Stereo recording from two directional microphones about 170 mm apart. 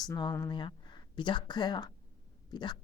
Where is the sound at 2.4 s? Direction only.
25° left (ahead or behind).